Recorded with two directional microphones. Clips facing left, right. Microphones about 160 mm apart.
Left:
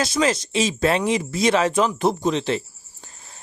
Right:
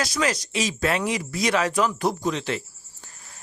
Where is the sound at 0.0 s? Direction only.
25° left (ahead or behind).